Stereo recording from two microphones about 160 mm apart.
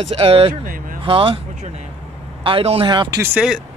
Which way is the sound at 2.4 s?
35° right (ahead or behind).